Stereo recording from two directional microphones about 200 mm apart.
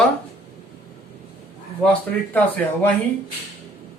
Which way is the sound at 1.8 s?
10° left (ahead or behind).